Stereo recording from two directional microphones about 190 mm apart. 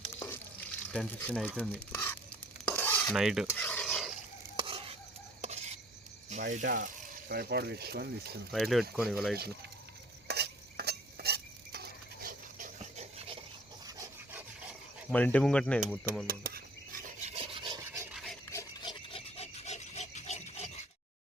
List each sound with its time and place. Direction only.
0.9 s speech: 5° left (ahead or behind)
2.6 s stir: 10° left (ahead or behind)
3.5 s mechanisms: 10° left (ahead or behind)
4.6 s stir: 30° right (ahead or behind)
6.3 s speech: 40° right (ahead or behind); by 8.4 s 60° right (ahead or behind)
8.5 s speech: centre (ahead or behind)
10.2 s stir: 60° right (ahead or behind); by 13.4 s 30° right (ahead or behind)
13.8 s rub: 15° right (ahead or behind)
15.1 s speech: 5° left (ahead or behind)
16.2 s rub: 50° right (ahead or behind); by 18.2 s 15° right (ahead or behind)
18.5 s filing: 20° left (ahead or behind); by 20.8 s 35° left (ahead or behind)